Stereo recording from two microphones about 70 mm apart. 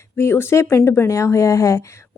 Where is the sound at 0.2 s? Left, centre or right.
Left.